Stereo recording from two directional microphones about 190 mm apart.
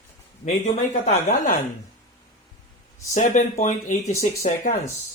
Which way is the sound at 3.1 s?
35° left (ahead or behind).